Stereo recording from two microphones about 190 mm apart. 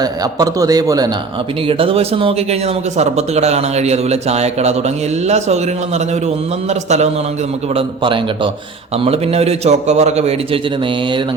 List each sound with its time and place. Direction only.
0.0 s a man's voice: 20° right (ahead or behind)
7.8 s a man's voice: 25° right (ahead or behind)